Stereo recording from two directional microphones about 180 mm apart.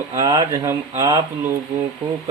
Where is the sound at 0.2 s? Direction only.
20° right (ahead or behind).